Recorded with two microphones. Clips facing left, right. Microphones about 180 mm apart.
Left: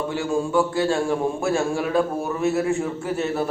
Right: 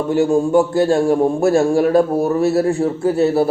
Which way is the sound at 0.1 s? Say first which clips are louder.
Right 11 dB; 40° right (ahead or behind).